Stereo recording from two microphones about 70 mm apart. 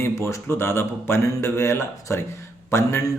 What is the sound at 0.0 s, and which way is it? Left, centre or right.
A man's voice, left.